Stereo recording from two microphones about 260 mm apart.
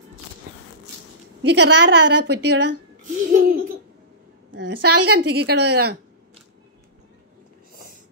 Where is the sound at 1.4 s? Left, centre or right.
Right.